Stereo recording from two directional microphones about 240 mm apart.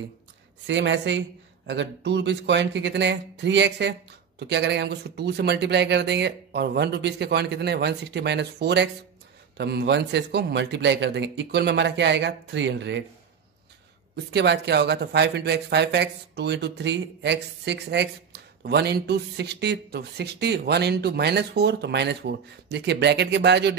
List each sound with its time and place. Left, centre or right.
0.7 s speech: right
14.1 s speech: right